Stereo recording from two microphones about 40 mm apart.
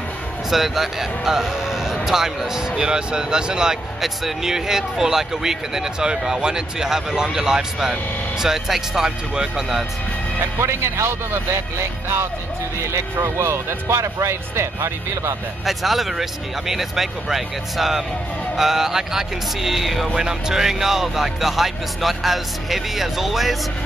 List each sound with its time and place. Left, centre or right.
0.5 s speech: centre
4.0 s speech: centre
10.6 s speech: right
15.6 s speech: centre
20.2 s speech: centre